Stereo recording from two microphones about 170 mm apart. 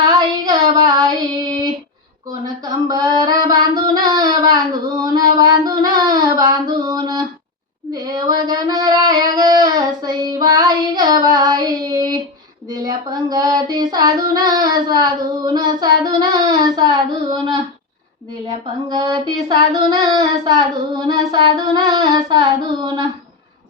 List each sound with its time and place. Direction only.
0.0 s child singing: 25° right (ahead or behind)
2.8 s child singing: 20° right (ahead or behind)
6.8 s female singing: 25° right (ahead or behind)
7.9 s a sound: 25° right (ahead or behind)
12.7 s child singing: 25° right (ahead or behind)
18.9 s child singing: 25° right (ahead or behind)